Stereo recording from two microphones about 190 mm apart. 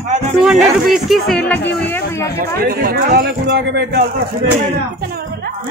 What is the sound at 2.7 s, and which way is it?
Speech, 55° right (ahead or behind).